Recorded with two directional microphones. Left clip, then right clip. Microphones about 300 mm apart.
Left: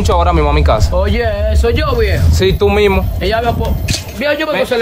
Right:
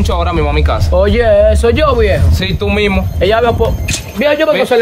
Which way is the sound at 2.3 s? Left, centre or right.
Centre.